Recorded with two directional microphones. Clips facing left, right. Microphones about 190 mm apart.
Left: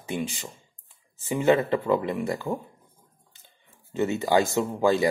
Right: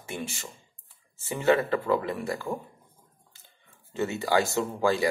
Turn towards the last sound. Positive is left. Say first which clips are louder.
# left 3 dB
turn(degrees=20)  # may be behind; listen again after turning